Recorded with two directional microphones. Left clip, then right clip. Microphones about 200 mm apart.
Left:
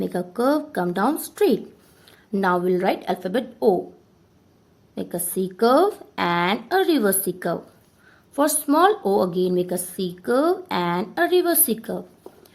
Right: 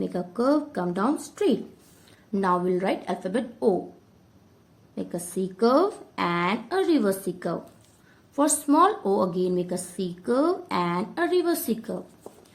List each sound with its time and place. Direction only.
0.0 s a woman's voice: 35° left (ahead or behind)
4.9 s speech: 30° left (ahead or behind)